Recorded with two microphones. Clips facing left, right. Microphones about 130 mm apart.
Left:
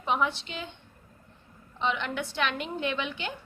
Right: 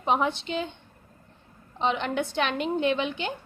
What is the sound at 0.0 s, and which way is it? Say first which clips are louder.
Speech: right 3 dB; 25° right (ahead or behind).